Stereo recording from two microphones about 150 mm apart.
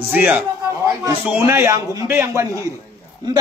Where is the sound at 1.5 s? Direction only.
20° right (ahead or behind).